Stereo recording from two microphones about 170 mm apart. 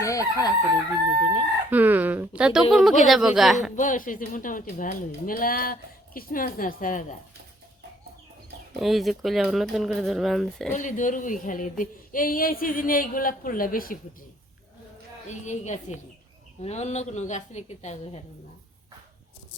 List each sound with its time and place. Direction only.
0.0 s chicken: 20° left (ahead or behind)
1.7 s speech: 10° right (ahead or behind)
3.8 s a woman's voice: 50° left (ahead or behind)
8.7 s speech: centre (ahead or behind)
10.7 s a woman's voice: 50° left (ahead or behind)
15.3 s a woman's voice: 45° left (ahead or behind)